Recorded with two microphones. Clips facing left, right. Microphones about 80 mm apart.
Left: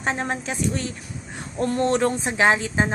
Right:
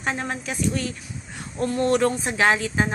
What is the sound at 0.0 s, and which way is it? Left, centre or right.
A woman's voice, left.